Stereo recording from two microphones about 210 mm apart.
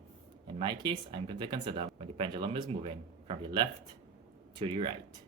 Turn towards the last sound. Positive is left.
turn(degrees=-25)  # may be behind; listen again after turning